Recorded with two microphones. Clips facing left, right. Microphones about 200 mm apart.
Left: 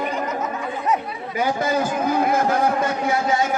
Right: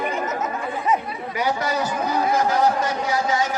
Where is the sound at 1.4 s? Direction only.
50° left (ahead or behind).